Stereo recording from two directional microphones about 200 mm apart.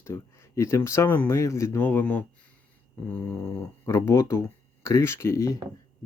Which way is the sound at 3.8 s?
15° left (ahead or behind).